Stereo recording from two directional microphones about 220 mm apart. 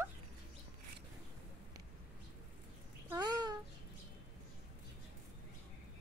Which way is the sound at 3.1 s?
20° right (ahead or behind).